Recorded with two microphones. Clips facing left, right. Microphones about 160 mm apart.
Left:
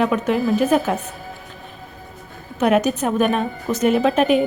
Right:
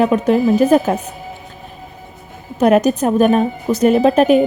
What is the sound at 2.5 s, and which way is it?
A woman's voice, 40° right (ahead or behind).